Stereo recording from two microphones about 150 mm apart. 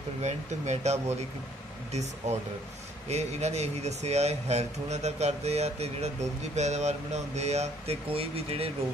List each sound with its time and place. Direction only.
0.2 s speech: 45° right (ahead or behind)